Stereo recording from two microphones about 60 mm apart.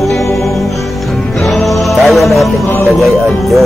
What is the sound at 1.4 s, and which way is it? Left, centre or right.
Music, centre.